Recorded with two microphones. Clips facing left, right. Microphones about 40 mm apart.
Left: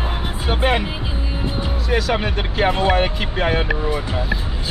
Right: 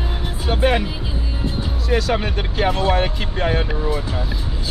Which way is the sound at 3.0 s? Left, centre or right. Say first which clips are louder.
Left 1 dB; left.